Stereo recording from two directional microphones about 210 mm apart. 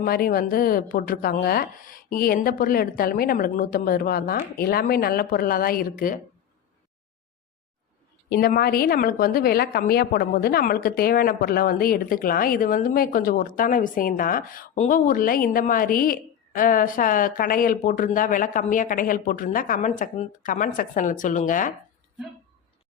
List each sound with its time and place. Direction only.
0.0 s speech: 45° left (ahead or behind)
8.3 s a woman's voice: 45° left (ahead or behind)